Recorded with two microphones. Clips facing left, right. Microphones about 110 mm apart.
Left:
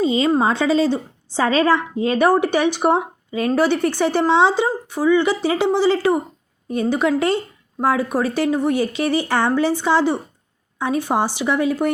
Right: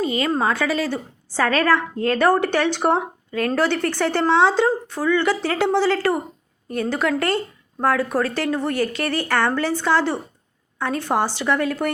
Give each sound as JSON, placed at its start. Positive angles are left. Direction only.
{"t": 0.0, "sound": "a woman's voice", "side_deg": 20}